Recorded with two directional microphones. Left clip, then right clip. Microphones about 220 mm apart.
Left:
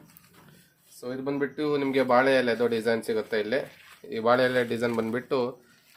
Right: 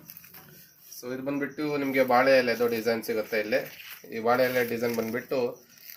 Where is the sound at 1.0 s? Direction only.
50° left (ahead or behind).